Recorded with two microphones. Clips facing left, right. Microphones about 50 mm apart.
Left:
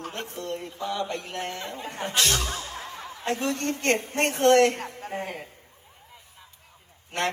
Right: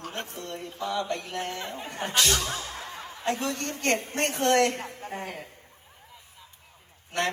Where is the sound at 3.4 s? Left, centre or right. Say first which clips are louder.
Left 3 dB; left.